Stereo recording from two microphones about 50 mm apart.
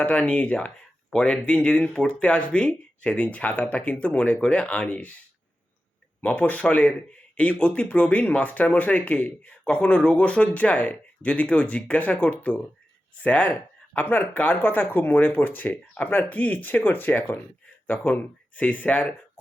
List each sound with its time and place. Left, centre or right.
0.0 s speech: left
6.2 s speech: left
8.3 s speech: left